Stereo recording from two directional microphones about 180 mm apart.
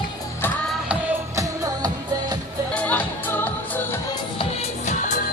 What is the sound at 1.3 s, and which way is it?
Music, 20° right (ahead or behind).